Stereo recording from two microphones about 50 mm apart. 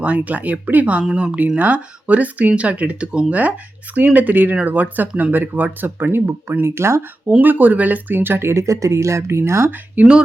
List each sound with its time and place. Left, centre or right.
0.0 s speech: right
3.9 s speech: right
6.7 s speech: right
7.4 s speech: right
10.0 s speech: right